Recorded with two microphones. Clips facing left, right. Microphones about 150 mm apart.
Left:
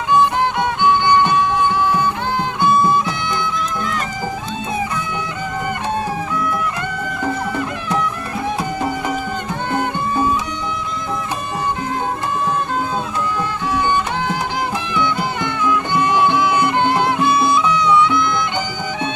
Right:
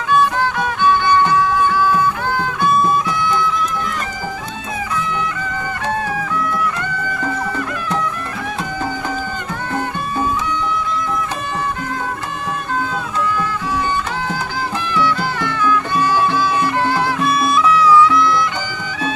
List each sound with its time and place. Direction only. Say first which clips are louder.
0.1 s music: even; 20° left (ahead or behind)
14.9 s music: right 2 dB; 20° left (ahead or behind)